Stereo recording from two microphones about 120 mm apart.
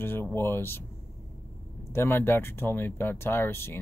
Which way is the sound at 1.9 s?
20° left (ahead or behind).